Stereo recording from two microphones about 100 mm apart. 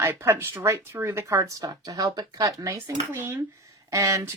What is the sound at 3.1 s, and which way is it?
Speech, 25° right (ahead or behind).